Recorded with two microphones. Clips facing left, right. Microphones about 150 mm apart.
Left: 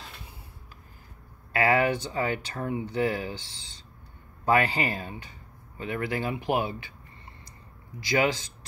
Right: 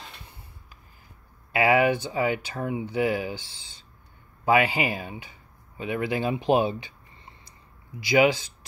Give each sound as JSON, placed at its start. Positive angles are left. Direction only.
{"t": 0.0, "sound": "rub", "side_deg": 5}
{"t": 1.5, "sound": "speech", "side_deg": -15}
{"t": 4.5, "sound": "speech", "side_deg": -10}
{"t": 8.0, "sound": "speech", "side_deg": -15}